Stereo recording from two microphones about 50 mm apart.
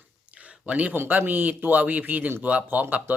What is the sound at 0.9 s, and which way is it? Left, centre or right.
Speech, right.